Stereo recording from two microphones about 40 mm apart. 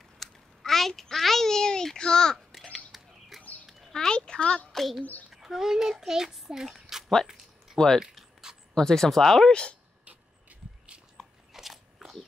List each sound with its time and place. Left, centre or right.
0.2 s a sound: centre
2.0 s speech: centre
2.5 s a sound: centre
2.9 s bird: centre
3.9 s a sound: centre
4.7 s a child's voice: centre
7.7 s speech: centre
8.1 s a sound: centre
8.7 s speech: centre
9.5 s speech: left
10.0 s vehicle: right
11.5 s single-lens reflex camera: centre